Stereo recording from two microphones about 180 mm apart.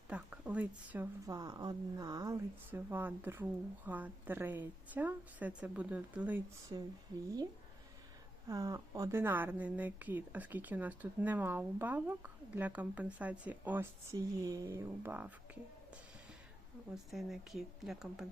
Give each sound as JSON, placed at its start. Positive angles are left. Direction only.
{"t": 0.1, "sound": "a woman's voice", "side_deg": -5}
{"t": 1.3, "sound": "a woman's voice", "side_deg": -20}
{"t": 8.4, "sound": "a woman's voice", "side_deg": -20}
{"t": 16.9, "sound": "speech", "side_deg": 0}